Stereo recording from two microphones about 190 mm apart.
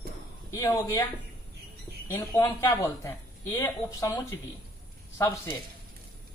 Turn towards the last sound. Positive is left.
turn(degrees=15)  # may be behind; listen again after turning